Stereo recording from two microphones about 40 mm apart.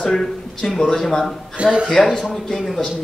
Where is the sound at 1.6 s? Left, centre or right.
Right.